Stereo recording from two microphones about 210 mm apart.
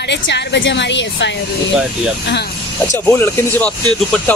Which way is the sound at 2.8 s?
15° left (ahead or behind).